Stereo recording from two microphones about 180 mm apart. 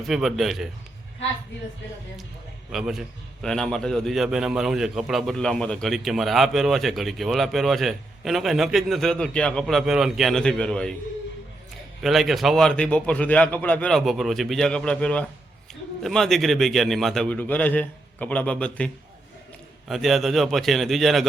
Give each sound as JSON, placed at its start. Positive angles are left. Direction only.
{"t": 0.1, "sound": "a man's voice", "side_deg": 0}
{"t": 2.7, "sound": "a man's voice", "side_deg": -5}
{"t": 12.0, "sound": "a man's voice", "side_deg": 0}
{"t": 19.9, "sound": "a man's voice", "side_deg": 0}